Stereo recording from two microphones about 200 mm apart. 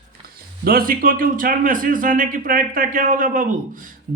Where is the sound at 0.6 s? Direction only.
50° right (ahead or behind).